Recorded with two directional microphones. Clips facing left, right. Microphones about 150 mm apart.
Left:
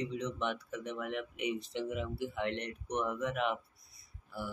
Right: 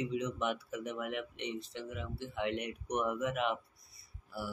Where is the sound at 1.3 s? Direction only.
10° left (ahead or behind).